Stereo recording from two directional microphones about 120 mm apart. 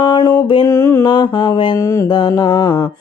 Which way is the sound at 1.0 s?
40° left (ahead or behind).